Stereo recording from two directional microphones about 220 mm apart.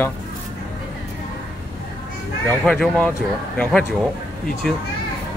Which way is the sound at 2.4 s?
5° left (ahead or behind).